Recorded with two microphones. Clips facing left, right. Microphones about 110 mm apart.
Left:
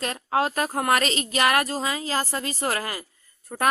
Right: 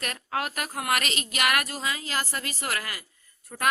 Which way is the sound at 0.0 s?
25° left (ahead or behind).